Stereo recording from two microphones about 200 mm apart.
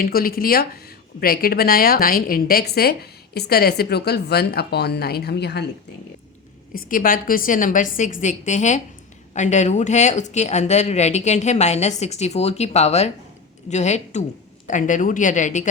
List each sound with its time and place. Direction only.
0.0 s a woman's voice: 45° left (ahead or behind)
6.7 s speech: 45° left (ahead or behind)